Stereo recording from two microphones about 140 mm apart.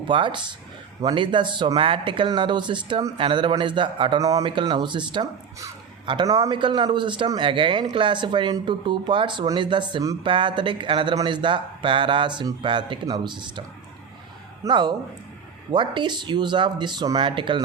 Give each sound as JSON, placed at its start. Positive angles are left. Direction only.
{"t": 0.1, "sound": "speech", "side_deg": -35}
{"t": 4.2, "sound": "speech", "side_deg": -25}
{"t": 14.7, "sound": "speech", "side_deg": -35}